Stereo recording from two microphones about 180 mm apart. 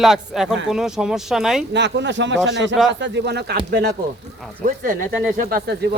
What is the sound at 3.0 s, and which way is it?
Speech, 75° right (ahead or behind).